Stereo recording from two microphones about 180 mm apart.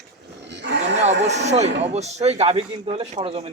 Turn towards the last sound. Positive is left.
turn(degrees=-30)  # may be behind; listen again after turning